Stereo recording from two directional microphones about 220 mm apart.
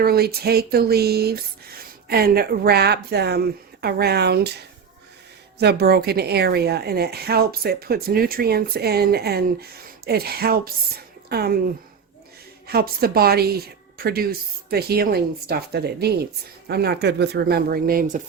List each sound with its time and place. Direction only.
0.0 s a woman's voice: 45° right (ahead or behind)
12.6 s speech: 45° right (ahead or behind)